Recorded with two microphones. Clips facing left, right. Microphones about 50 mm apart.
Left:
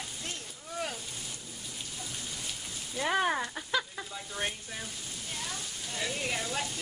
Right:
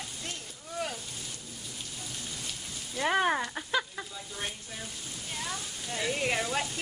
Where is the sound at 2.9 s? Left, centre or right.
Centre.